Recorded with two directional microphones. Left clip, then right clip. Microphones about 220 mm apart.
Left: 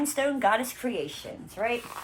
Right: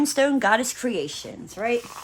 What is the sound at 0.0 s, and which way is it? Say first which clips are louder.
A woman's voice: right 5 dB; 40° right (ahead or behind).